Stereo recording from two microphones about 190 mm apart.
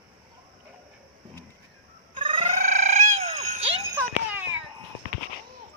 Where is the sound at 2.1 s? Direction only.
25° right (ahead or behind).